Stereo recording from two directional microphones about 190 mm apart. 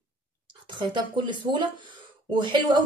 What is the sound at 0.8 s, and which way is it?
A woman's voice, 25° right (ahead or behind).